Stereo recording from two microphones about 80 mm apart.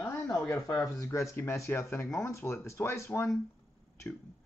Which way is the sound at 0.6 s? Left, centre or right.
Left.